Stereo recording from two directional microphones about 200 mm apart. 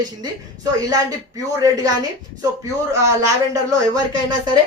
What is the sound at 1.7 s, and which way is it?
Speech, 20° right (ahead or behind).